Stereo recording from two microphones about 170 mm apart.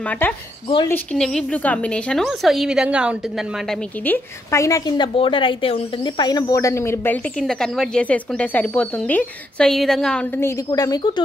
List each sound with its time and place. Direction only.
0.8 s speech: 5° left (ahead or behind)
4.0 s a woman's voice: 15° left (ahead or behind)
7.3 s speech: 5° left (ahead or behind)
10.4 s a woman's voice: 20° left (ahead or behind)